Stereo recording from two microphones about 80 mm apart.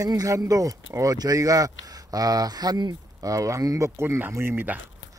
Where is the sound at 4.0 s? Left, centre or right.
Right.